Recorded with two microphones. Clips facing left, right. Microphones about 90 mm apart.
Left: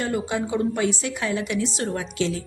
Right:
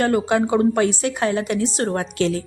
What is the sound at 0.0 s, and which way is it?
A woman's voice, 60° right (ahead or behind).